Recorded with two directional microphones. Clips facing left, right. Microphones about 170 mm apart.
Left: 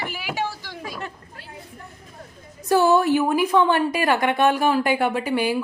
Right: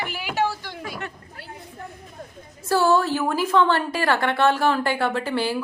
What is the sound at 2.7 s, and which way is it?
A woman's voice, 15° left (ahead or behind).